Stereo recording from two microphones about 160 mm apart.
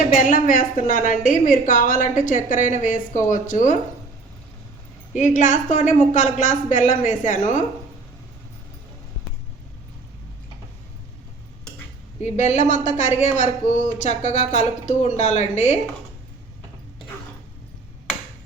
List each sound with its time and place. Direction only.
0.2 s a woman's voice: 60° left (ahead or behind)
5.1 s speech: 50° left (ahead or behind)
12.2 s speech: 45° left (ahead or behind)